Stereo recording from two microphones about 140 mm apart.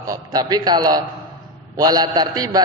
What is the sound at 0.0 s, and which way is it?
A man's voice, 25° right (ahead or behind).